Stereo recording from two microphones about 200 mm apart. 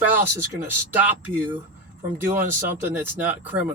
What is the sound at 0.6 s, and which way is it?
Speech, 10° right (ahead or behind).